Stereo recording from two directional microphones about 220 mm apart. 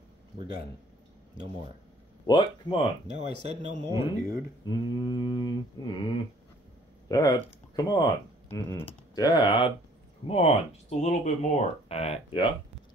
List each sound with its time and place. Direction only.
2.2 s speech: 20° left (ahead or behind)
3.4 s speech: 25° right (ahead or behind)
3.9 s speech: 15° right (ahead or behind)
4.6 s speech: 20° left (ahead or behind)
7.1 s speech: 15° left (ahead or behind)